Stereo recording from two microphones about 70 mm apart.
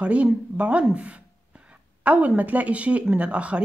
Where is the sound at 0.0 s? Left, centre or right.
Centre.